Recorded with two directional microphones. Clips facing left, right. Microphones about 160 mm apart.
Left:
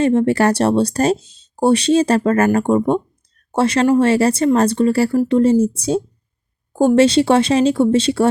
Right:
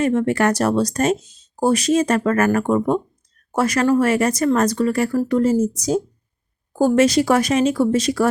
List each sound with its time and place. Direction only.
0.0 s speech: 30° left (ahead or behind)